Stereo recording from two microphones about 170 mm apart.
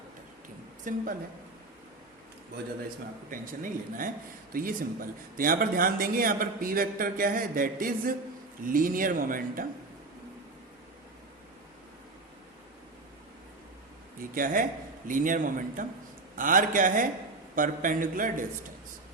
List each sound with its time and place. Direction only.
0.9 s a man's voice: 50° right (ahead or behind)
3.2 s a man's voice: 55° right (ahead or behind)
14.2 s a man's voice: 55° right (ahead or behind)